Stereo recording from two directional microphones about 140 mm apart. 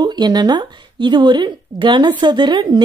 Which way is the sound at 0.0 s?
30° right (ahead or behind).